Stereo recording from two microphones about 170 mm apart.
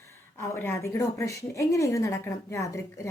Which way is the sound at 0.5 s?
15° left (ahead or behind).